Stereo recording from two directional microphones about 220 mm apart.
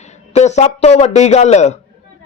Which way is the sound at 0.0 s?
30° left (ahead or behind).